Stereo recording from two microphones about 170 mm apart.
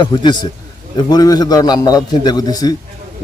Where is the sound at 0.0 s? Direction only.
25° left (ahead or behind).